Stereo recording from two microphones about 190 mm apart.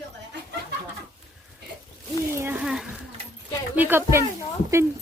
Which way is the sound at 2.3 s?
10° right (ahead or behind).